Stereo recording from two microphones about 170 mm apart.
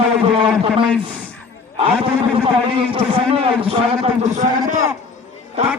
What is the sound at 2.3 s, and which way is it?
A man's voice, 30° right (ahead or behind).